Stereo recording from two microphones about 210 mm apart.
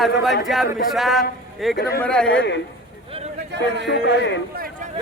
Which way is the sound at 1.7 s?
50° left (ahead or behind).